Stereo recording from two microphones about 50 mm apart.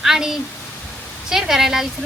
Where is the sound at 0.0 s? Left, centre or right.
Centre.